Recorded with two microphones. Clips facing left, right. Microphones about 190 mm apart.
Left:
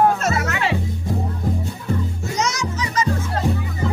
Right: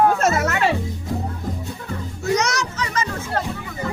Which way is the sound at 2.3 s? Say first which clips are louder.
Right 1 dB; 65° right (ahead or behind).